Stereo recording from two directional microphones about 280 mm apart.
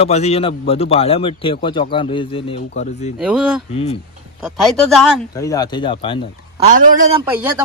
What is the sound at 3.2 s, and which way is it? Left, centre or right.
Speech, centre.